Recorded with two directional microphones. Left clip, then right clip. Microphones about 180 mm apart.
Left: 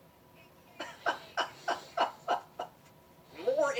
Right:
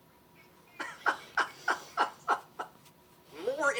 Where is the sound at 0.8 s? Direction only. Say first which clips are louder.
Right 3 dB; 30° left (ahead or behind).